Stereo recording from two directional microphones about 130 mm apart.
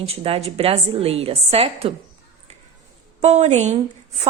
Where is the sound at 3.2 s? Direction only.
60° right (ahead or behind).